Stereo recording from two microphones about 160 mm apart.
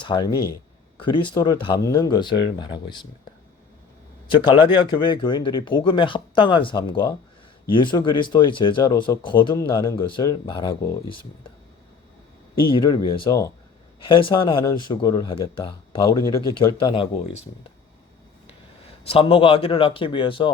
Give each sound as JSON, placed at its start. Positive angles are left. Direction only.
{"t": 0.0, "sound": "speech", "side_deg": 30}
{"t": 4.4, "sound": "speech", "side_deg": 30}
{"t": 12.6, "sound": "speech", "side_deg": 30}
{"t": 16.0, "sound": "speech", "side_deg": 20}
{"t": 19.0, "sound": "speech", "side_deg": 35}